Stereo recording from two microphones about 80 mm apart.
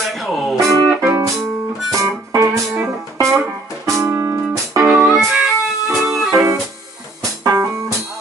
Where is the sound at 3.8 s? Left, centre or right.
Right.